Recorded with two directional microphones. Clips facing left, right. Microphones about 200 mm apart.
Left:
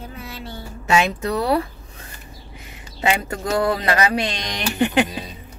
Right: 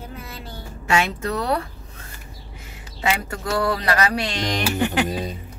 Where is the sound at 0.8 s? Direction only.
20° left (ahead or behind).